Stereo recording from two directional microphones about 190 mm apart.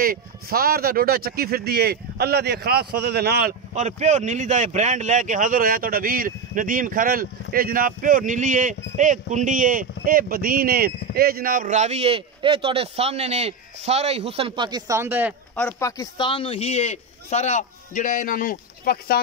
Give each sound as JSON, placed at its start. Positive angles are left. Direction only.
{"t": 0.0, "sound": "speech", "side_deg": -50}
{"t": 3.7, "sound": "speech", "side_deg": -35}
{"t": 15.5, "sound": "a man's voice", "side_deg": 10}